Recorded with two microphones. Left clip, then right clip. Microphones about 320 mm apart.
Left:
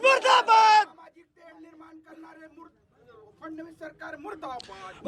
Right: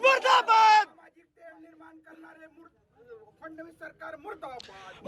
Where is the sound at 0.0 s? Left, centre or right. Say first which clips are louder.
Left 2 dB; centre.